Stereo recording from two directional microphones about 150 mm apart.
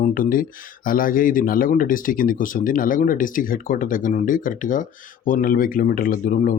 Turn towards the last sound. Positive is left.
turn(degrees=65)  # may be behind; listen again after turning